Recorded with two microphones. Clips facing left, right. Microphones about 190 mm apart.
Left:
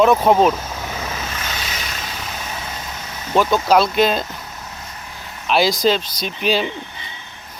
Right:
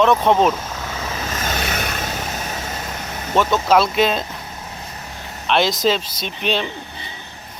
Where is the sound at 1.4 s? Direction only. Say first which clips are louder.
Right 5 dB; 50° right (ahead or behind).